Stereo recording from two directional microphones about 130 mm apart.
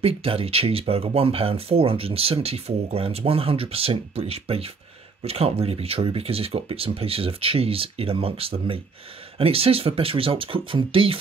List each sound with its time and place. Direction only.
0.0 s speech: 45° right (ahead or behind)